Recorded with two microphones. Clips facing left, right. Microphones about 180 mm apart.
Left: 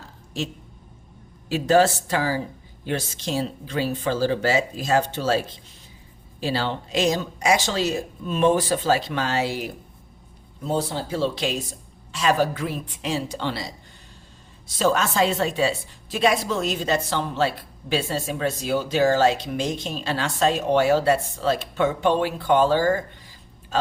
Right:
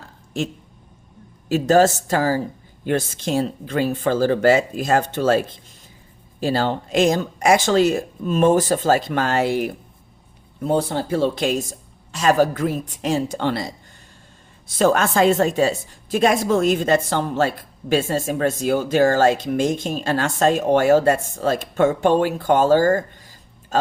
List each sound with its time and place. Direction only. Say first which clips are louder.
0.4 s a woman's voice: right 4 dB; 50° right (ahead or behind)
14.8 s a woman's voice: right 4 dB; 55° right (ahead or behind)